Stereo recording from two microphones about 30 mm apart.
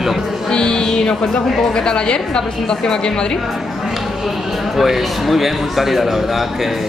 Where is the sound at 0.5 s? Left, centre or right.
Left.